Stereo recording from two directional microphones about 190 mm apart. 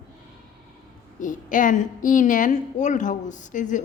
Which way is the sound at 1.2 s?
45° left (ahead or behind).